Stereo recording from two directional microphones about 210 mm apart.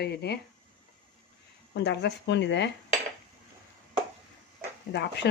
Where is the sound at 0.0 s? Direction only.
50° left (ahead or behind).